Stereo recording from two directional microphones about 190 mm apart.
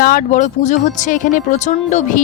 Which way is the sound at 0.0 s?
45° left (ahead or behind).